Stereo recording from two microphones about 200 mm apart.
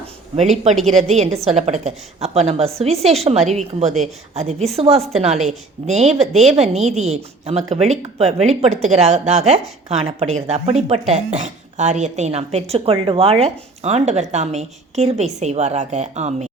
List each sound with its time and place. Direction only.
1.0 s speech: 30° right (ahead or behind)